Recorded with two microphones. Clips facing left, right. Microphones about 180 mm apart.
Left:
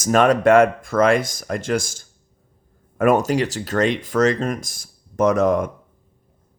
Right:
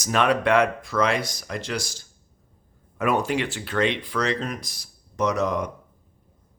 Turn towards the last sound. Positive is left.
turn(degrees=50)  # may be behind; listen again after turning